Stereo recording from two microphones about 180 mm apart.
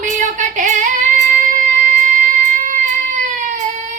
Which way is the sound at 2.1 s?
45° right (ahead or behind).